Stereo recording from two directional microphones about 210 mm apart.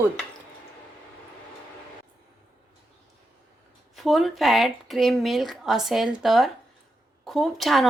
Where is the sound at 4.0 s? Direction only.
Centre (ahead or behind).